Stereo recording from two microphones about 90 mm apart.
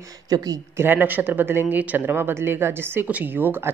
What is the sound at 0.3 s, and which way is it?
Speech, 45° right (ahead or behind).